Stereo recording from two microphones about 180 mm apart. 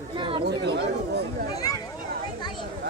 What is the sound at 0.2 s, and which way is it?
Chatter, 30° right (ahead or behind).